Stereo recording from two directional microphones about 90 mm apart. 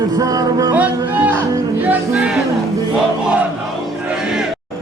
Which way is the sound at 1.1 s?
20° right (ahead or behind).